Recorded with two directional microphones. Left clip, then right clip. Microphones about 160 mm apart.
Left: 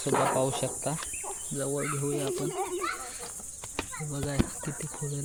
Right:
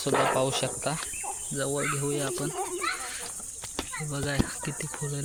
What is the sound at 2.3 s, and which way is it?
Speech, 55° right (ahead or behind).